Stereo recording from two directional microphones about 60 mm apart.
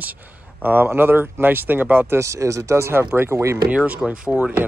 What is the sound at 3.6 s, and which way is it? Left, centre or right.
Speech, right.